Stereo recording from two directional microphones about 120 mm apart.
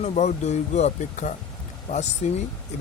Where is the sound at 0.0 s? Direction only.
70° left (ahead or behind); by 1.3 s 90° left.